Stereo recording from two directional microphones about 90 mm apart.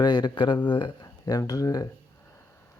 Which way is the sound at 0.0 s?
55° left (ahead or behind).